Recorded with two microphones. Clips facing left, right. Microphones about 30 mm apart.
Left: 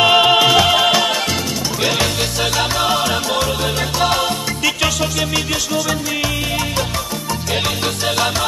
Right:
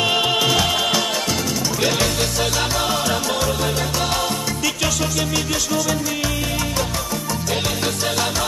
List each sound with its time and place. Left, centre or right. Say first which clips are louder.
0.0 s music: left 7 dB; left